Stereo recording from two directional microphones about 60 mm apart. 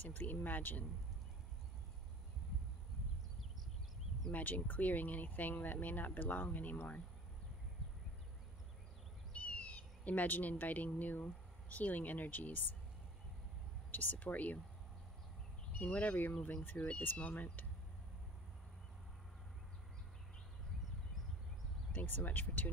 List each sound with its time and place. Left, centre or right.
0.0 s speech: left
4.3 s speech: left
9.3 s speech: left
13.9 s speech: left
15.8 s speech: left
21.9 s speech: left